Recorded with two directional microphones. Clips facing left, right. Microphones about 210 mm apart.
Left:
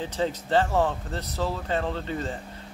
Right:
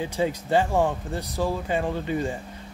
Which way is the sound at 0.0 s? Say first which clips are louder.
Right 2 dB; 10° right (ahead or behind).